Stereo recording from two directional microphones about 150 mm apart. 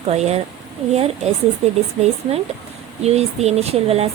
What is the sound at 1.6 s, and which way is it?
Speech, 45° right (ahead or behind).